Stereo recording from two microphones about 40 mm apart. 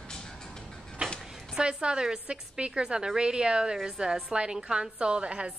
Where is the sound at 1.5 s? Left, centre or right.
Right.